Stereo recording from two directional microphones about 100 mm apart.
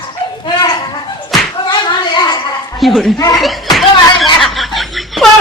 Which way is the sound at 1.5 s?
50° left (ahead or behind).